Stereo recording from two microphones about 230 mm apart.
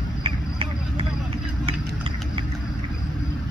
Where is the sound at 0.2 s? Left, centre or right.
Right.